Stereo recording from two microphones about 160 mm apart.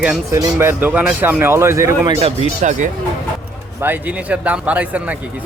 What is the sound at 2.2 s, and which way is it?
Speech, 50° right (ahead or behind).